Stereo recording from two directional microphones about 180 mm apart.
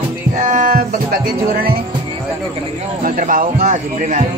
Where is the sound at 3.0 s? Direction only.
50° right (ahead or behind).